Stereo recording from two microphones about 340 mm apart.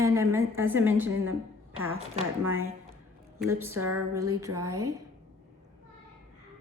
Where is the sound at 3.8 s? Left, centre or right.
Right.